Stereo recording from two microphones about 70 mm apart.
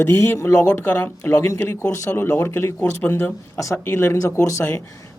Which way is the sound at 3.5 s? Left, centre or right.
Left.